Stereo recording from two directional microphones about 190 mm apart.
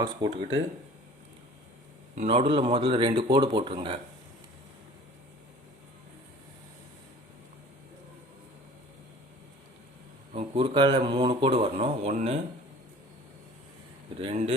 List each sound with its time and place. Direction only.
0.2 s speech: 20° right (ahead or behind)
2.1 s speech: 30° right (ahead or behind)
10.3 s speech: 30° right (ahead or behind)
14.2 s speech: 30° right (ahead or behind)